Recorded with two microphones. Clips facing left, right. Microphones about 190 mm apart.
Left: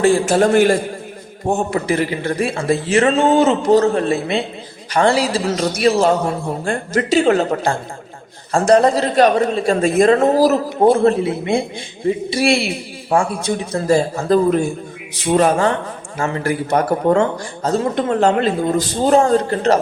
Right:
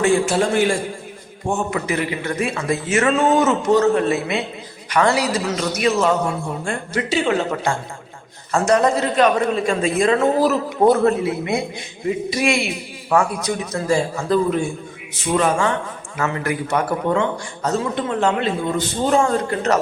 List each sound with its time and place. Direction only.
0.0 s speech: 40° left (ahead or behind)
0.4 s a man's voice: 50° left (ahead or behind)
1.5 s speech: 35° left (ahead or behind)
10.8 s a man's voice: 25° left (ahead or behind)